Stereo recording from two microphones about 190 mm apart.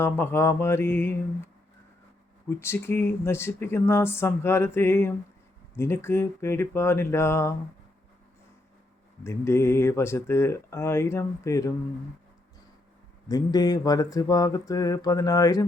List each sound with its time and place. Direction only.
0.0 s speech: 10° left (ahead or behind)
2.5 s speech: 15° left (ahead or behind)
9.2 s speech: 15° left (ahead or behind)
13.2 s mantra: 20° left (ahead or behind)